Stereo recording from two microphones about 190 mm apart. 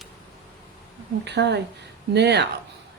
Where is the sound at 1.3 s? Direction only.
60° right (ahead or behind).